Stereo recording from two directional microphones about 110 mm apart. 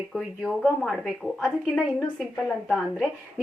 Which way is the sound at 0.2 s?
Centre (ahead or behind).